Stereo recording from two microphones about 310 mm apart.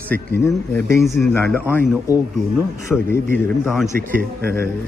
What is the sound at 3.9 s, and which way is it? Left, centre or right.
Speech, right.